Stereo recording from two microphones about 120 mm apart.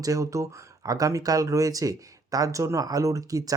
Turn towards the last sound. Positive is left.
turn(degrees=-30)  # may be behind; listen again after turning